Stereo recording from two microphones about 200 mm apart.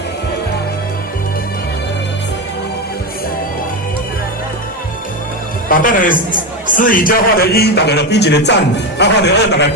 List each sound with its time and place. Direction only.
5.6 s a man's voice: 45° left (ahead or behind); by 9.7 s 60° left (ahead or behind)